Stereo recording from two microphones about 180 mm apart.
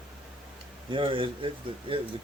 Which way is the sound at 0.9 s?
30° right (ahead or behind).